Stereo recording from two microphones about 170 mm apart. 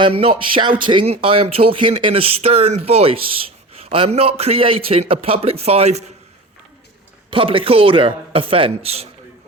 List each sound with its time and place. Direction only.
0.0 s speech: 35° right (ahead or behind)
7.3 s speech: 30° right (ahead or behind)